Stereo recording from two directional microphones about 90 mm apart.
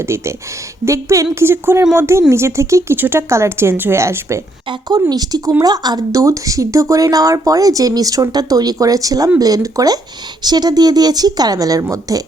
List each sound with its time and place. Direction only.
0.9 s speech: 35° right (ahead or behind)
4.7 s a woman's voice: 50° right (ahead or behind)